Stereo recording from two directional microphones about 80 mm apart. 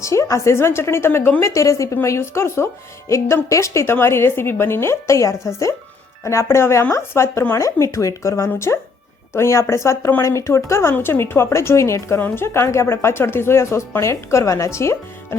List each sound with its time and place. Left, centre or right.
0.0 s speech: left